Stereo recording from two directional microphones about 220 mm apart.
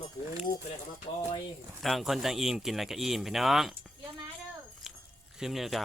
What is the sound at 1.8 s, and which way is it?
Speech, centre (ahead or behind).